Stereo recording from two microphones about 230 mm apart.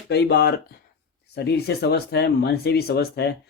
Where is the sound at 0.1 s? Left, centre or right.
Left.